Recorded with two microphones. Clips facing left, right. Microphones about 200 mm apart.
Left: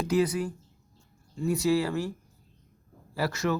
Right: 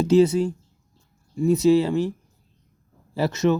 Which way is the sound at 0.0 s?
25° right (ahead or behind).